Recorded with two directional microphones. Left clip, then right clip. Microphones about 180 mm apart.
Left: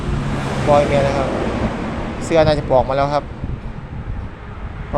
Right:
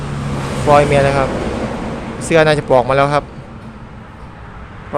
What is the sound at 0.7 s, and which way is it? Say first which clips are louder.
Speech: right 4 dB; 30° right (ahead or behind).